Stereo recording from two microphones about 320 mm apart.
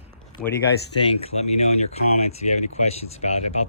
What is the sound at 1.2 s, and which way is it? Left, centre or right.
Speech, centre.